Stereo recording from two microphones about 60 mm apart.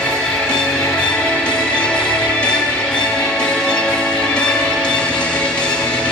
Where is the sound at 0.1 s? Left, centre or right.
Centre.